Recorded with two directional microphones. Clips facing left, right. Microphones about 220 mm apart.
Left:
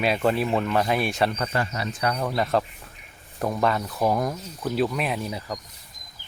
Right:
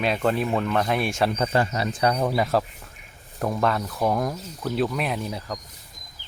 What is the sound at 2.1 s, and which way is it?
Speech, 10° right (ahead or behind).